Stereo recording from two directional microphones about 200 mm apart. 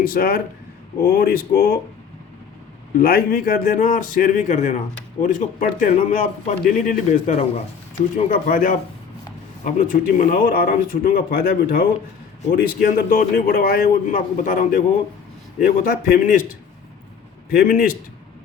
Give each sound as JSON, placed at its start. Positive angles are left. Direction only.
{"t": 0.0, "sound": "a man's voice", "side_deg": 45}
{"t": 3.0, "sound": "a man's voice", "side_deg": 50}
{"t": 17.5, "sound": "a man's voice", "side_deg": 45}